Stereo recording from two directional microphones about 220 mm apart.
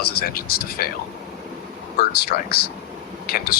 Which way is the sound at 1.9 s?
40° left (ahead or behind).